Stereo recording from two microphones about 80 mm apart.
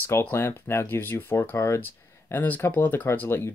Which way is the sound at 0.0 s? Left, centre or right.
Left.